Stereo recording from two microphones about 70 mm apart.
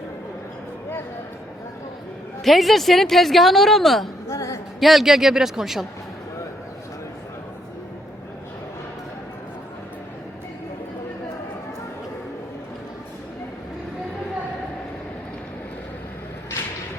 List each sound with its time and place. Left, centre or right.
2.4 s speech: centre
4.3 s a sound: left
4.8 s speech: centre